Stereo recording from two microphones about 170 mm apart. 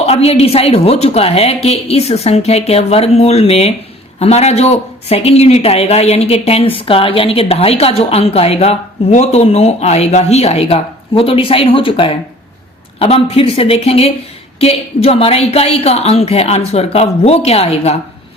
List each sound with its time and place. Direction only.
0.0 s speech: 35° left (ahead or behind)